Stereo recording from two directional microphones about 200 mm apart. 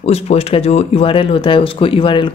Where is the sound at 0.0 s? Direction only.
30° left (ahead or behind).